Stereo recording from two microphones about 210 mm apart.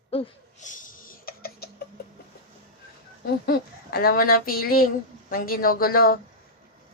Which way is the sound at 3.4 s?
45° left (ahead or behind).